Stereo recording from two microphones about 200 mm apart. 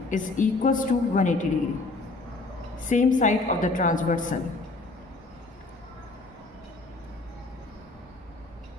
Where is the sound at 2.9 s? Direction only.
40° left (ahead or behind).